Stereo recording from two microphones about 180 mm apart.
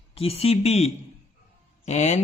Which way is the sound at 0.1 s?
30° left (ahead or behind).